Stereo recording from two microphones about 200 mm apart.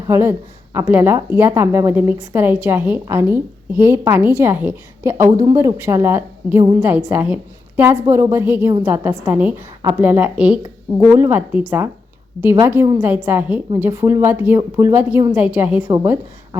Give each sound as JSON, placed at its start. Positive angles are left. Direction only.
{"t": 0.1, "sound": "speech", "side_deg": -10}